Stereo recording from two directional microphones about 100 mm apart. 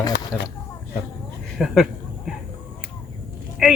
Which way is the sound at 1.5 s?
5° right (ahead or behind).